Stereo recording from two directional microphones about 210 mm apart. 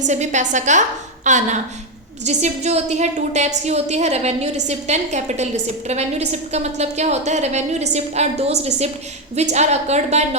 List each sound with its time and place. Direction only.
0.0 s a woman's voice: 35° right (ahead or behind)